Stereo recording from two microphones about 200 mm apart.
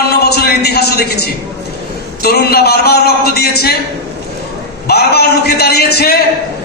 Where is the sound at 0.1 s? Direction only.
50° left (ahead or behind).